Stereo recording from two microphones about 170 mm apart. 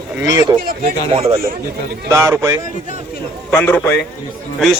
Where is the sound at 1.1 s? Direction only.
35° right (ahead or behind).